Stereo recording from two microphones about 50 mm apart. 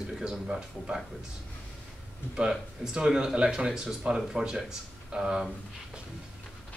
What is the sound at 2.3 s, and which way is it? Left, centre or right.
Speech, centre.